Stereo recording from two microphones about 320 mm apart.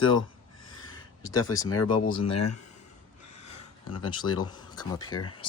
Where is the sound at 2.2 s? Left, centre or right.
Left.